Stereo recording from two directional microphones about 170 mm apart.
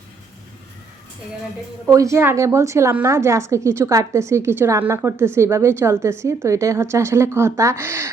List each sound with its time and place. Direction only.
1.9 s a woman's voice: 20° right (ahead or behind)